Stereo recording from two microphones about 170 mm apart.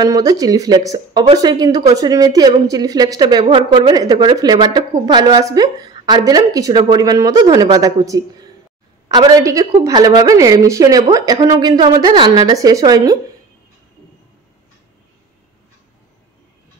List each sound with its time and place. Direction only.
0.0 s a woman's voice: 20° right (ahead or behind)